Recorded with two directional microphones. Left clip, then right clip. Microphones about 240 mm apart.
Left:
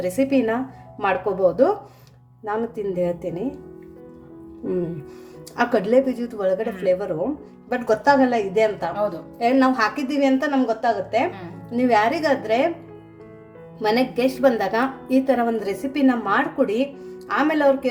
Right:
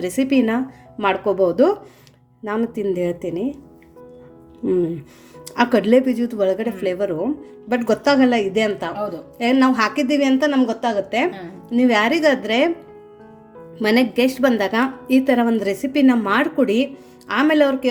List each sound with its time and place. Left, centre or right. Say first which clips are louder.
0.0 s a woman's voice: right 1 dB; right
5.5 s a woman's voice: right 3 dB; right
13.8 s a woman's voice: right 3 dB; right